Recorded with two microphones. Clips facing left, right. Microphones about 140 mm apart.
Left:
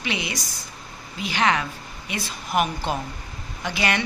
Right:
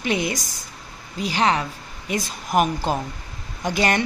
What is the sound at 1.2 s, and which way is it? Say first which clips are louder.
A woman's voice: right 2 dB; 35° right (ahead or behind).